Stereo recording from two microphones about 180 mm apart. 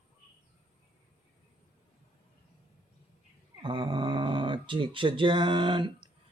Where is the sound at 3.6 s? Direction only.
25° right (ahead or behind).